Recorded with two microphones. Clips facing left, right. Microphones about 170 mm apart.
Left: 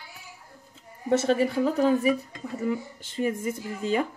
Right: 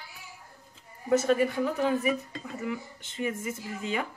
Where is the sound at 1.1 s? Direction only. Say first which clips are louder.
Left 1 dB; 30° left (ahead or behind).